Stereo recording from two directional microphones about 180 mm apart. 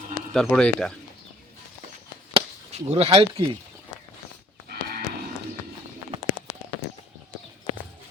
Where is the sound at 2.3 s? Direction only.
35° right (ahead or behind).